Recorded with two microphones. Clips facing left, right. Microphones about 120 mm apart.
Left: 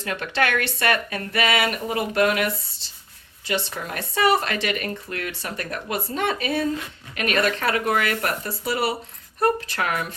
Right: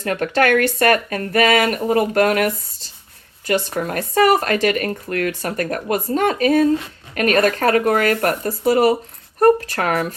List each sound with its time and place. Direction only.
0.0 s speech: 45° right (ahead or behind)